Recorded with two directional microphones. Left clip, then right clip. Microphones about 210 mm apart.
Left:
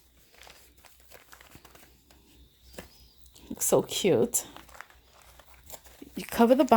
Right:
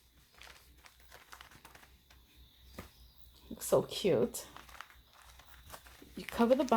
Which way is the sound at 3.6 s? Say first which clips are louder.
Left 5 dB; 50° left (ahead or behind).